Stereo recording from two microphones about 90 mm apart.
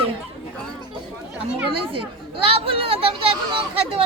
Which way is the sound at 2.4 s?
90° right.